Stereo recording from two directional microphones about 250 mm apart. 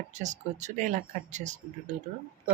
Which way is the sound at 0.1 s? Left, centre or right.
Right.